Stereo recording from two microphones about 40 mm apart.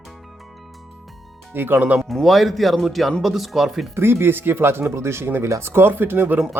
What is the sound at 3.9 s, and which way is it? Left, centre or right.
Speech, right.